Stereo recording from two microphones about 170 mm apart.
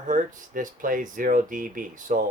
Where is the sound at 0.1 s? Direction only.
50° right (ahead or behind).